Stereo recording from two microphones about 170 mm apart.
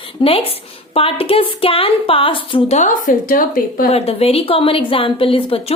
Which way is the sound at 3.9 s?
35° left (ahead or behind).